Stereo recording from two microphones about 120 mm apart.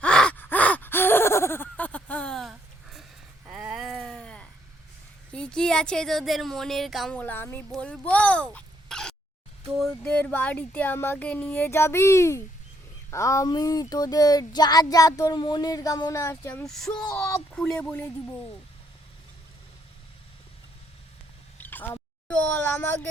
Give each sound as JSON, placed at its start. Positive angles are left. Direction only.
{"t": 0.0, "sound": "gasp", "side_deg": 10}
{"t": 3.5, "sound": "a sound", "side_deg": -5}
{"t": 5.3, "sound": "speech", "side_deg": 5}
{"t": 7.2, "sound": "speech", "side_deg": 15}
{"t": 13.1, "sound": "child singing", "side_deg": 25}
{"t": 16.6, "sound": "speech", "side_deg": 5}
{"t": 21.6, "sound": "a sound", "side_deg": 15}